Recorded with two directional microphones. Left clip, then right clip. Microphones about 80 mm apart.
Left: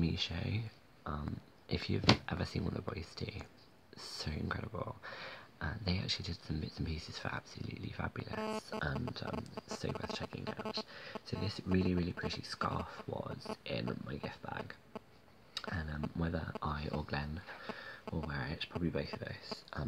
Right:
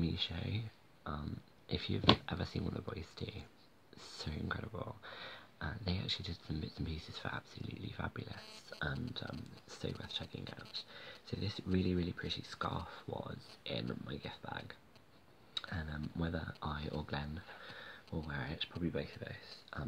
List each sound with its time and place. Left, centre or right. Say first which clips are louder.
0.0 s speech: left 1 dB; left
1.1 s speech: left 2 dB; left
18.9 s speech: left 3 dB; left